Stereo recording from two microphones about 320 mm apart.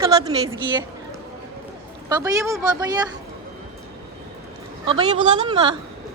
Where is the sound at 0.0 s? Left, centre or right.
Centre.